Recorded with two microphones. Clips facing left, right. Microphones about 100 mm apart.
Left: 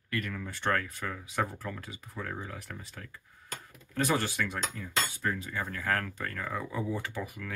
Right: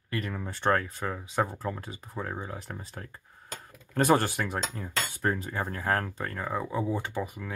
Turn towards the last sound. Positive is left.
turn(degrees=-25)  # may be behind; listen again after turning